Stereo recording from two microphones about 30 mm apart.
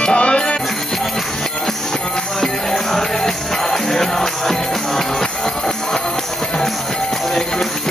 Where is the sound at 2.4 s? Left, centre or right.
Centre.